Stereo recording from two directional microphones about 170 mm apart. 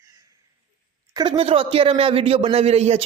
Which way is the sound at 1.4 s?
35° right (ahead or behind).